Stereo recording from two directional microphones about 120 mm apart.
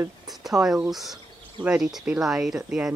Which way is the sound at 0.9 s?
Centre (ahead or behind).